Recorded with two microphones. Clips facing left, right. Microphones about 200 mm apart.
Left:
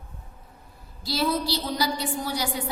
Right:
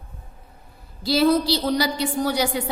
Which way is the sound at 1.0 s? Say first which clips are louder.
Right 8 dB; 70° right (ahead or behind).